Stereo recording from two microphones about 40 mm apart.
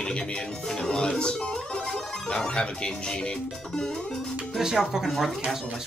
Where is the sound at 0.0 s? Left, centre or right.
Left.